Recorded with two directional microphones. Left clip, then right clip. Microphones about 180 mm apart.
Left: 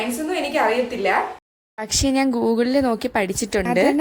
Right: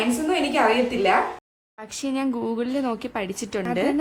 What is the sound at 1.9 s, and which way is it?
A woman's voice, 35° left (ahead or behind).